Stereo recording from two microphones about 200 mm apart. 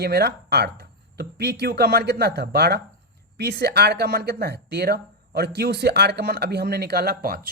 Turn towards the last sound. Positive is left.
turn(degrees=-45)  # may be behind; listen again after turning